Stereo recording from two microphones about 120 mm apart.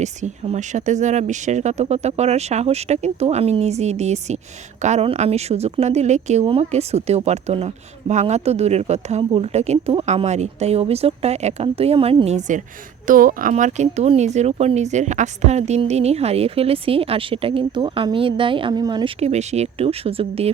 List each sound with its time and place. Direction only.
0.0 s speech: 80° right
6.4 s a woman's voice: 50° right (ahead or behind)
6.7 s speech: 65° right (ahead or behind); by 12.6 s 80° right
13.1 s a woman's voice: 90° right; by 18.7 s 45° right (ahead or behind)
18.7 s speech: 35° right (ahead or behind)
19.2 s speech: 70° right (ahead or behind)